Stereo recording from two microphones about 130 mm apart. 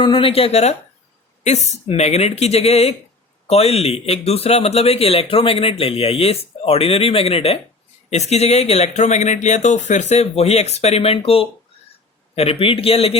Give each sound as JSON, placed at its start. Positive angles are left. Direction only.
{"t": 0.0, "sound": "a man's voice", "side_deg": 40}